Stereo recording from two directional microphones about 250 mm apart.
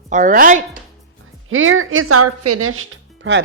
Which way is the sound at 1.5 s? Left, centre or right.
Right.